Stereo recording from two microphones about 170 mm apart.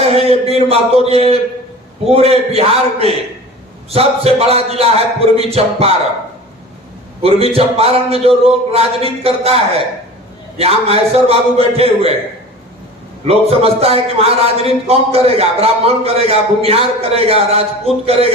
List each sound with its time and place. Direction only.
0.0 s a man's voice: 35° right (ahead or behind)
7.2 s a man's voice: 35° right (ahead or behind)
13.2 s a man's voice: 35° right (ahead or behind)